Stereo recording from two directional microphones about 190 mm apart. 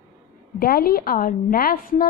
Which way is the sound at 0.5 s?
50° left (ahead or behind).